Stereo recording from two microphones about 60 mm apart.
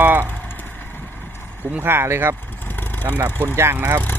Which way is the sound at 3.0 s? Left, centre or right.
Right.